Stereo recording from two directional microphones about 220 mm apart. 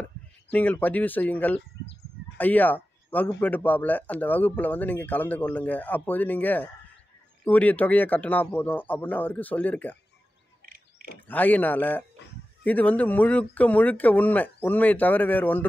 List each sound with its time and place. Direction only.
0.5 s speech: 5° left (ahead or behind)
2.3 s a sound: 10° left (ahead or behind)
3.3 s speech: 10° left (ahead or behind)
10.6 s mechanisms: 40° right (ahead or behind)
11.2 s speech: 10° left (ahead or behind)